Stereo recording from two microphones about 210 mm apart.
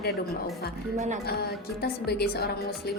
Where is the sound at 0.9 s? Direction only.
35° right (ahead or behind).